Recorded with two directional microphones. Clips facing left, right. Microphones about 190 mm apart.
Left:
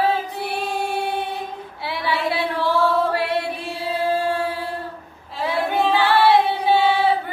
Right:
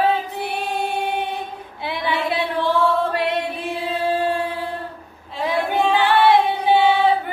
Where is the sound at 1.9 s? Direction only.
20° right (ahead or behind).